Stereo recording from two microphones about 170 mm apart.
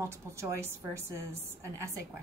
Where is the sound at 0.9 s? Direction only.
15° right (ahead or behind).